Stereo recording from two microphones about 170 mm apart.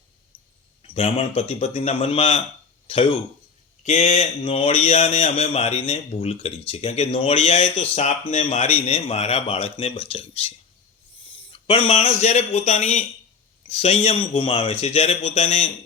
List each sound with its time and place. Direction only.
0.3 s a sound: 10° left (ahead or behind)
0.8 s a man's voice: 35° left (ahead or behind)
3.8 s a man's voice: 45° left (ahead or behind)